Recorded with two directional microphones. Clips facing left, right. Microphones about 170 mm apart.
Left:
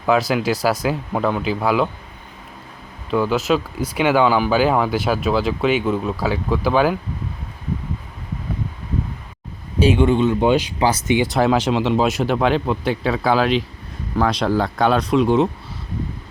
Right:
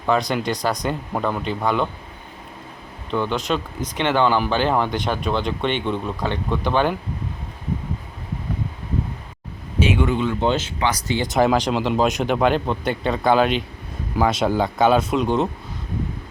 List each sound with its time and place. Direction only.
0.0 s speech: 5° left (ahead or behind)
3.1 s speech: 5° left (ahead or behind)
9.8 s speech: 30° left (ahead or behind)
10.4 s speech: 15° left (ahead or behind)
10.8 s speech: 30° left (ahead or behind)
11.0 s speech: 15° left (ahead or behind)
11.3 s speech: centre (ahead or behind)